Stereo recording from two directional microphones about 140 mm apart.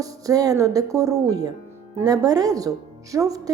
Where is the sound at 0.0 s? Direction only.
25° right (ahead or behind).